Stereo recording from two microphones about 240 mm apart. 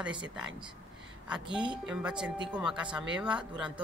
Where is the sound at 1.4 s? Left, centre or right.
Centre.